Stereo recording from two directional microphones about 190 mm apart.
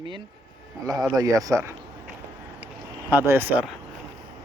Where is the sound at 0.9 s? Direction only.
20° right (ahead or behind).